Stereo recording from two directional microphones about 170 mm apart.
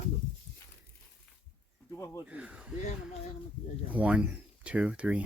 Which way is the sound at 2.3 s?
10° right (ahead or behind).